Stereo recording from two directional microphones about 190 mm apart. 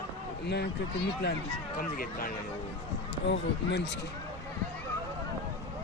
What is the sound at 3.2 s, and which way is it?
Speech, 70° left (ahead or behind).